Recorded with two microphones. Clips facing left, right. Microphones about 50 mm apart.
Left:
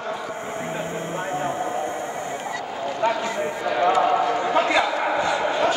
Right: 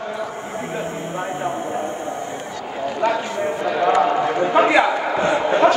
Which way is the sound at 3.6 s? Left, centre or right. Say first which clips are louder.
Right 1 dB; centre.